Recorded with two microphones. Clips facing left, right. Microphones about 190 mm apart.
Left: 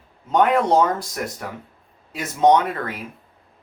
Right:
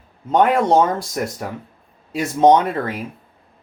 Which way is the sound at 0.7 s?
25° right (ahead or behind).